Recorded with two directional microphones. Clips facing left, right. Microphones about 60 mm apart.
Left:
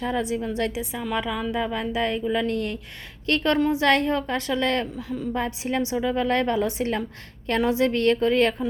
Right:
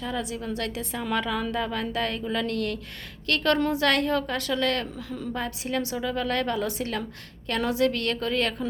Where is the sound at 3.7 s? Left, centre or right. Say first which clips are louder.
Left 3 dB; left.